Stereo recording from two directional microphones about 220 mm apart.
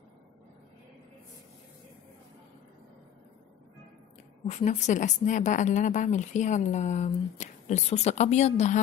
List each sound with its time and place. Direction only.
4.5 s a woman's voice: 30° left (ahead or behind)